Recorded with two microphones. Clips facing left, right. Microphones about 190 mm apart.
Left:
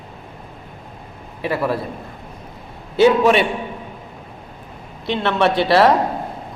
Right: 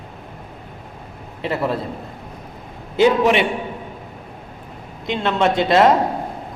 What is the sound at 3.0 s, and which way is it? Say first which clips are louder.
Speech: left 2 dB; 20° right (ahead or behind).